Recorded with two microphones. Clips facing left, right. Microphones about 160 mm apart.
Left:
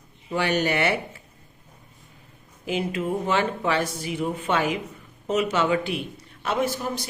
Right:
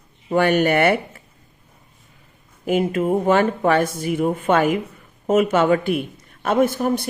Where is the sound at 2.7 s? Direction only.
50° right (ahead or behind).